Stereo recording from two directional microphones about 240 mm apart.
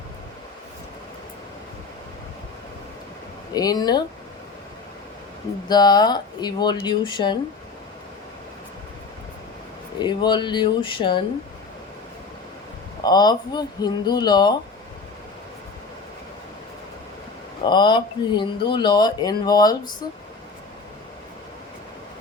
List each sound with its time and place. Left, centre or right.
3.5 s speech: centre
5.6 s speech: centre
10.0 s speech: centre
13.0 s speech: centre
17.7 s speech: centre